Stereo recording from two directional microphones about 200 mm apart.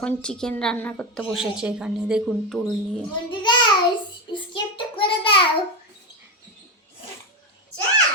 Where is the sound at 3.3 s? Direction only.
25° left (ahead or behind).